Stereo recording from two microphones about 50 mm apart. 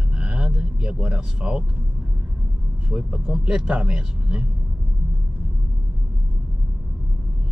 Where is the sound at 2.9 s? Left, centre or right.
Centre.